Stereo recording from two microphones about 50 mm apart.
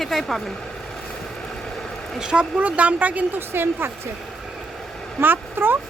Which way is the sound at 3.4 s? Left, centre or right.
Right.